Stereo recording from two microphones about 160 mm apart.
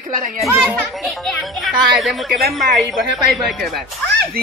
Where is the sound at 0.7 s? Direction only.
Centre (ahead or behind).